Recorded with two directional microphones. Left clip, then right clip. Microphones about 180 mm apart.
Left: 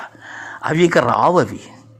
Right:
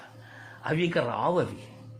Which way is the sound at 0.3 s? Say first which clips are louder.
Left 12 dB; 40° left (ahead or behind).